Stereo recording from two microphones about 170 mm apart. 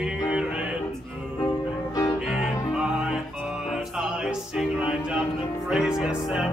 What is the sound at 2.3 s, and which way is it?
Music, 5° right (ahead or behind).